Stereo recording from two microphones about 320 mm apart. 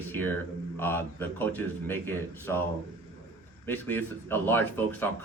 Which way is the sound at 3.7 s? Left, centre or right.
Centre.